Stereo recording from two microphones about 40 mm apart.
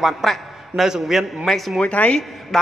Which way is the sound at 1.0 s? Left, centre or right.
Centre.